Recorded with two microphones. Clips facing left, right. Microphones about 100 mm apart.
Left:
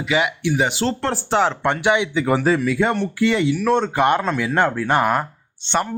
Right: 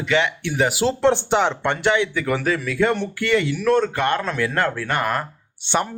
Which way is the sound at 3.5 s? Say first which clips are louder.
Left 1 dB; 10° left (ahead or behind).